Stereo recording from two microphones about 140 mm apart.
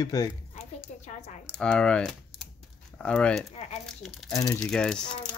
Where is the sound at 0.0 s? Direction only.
25° left (ahead or behind).